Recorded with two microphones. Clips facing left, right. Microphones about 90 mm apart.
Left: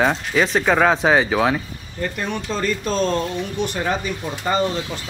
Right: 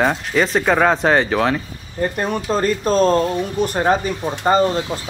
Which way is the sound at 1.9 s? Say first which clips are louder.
Right 5 dB; 40° right (ahead or behind).